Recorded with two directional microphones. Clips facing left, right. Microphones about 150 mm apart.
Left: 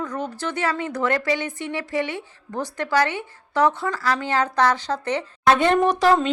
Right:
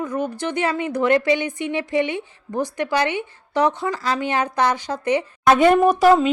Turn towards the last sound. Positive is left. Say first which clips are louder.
# right 4 dB
turn(degrees=-10)  # may be behind; listen again after turning